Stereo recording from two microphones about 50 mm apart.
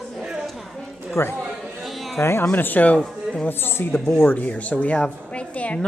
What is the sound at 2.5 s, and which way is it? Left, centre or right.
Speech, left.